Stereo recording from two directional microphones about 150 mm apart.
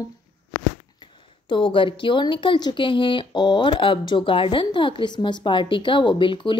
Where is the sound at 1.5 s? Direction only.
35° left (ahead or behind).